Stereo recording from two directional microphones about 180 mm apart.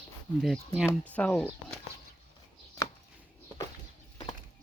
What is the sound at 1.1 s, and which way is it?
Speech, 10° left (ahead or behind).